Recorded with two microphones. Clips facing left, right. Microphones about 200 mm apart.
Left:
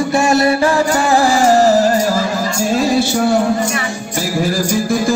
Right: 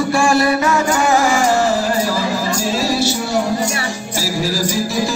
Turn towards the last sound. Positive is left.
turn(degrees=50)  # may be behind; listen again after turning